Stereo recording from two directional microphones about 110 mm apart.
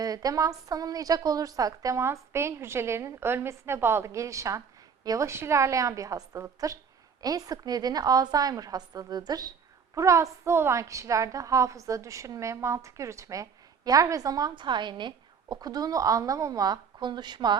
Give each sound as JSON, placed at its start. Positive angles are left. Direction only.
{"t": 0.0, "sound": "a woman's voice", "side_deg": -35}